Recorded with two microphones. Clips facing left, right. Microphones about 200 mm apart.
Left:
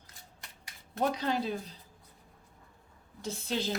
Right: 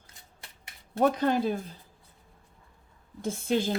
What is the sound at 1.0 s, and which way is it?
Speech, 50° right (ahead or behind).